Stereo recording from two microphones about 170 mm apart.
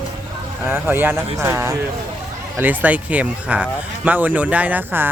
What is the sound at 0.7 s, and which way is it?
Speech, 10° right (ahead or behind).